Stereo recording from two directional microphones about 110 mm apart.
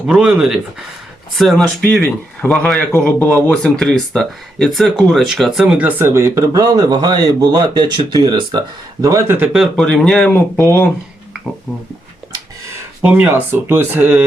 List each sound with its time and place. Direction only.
0.1 s speech: 5° right (ahead or behind)
6.0 s speech: 25° right (ahead or behind)
9.5 s speech: 5° right (ahead or behind)
9.8 s speech: 5° left (ahead or behind)
10.3 s speech: 15° left (ahead or behind)
13.0 s speech: 15° right (ahead or behind)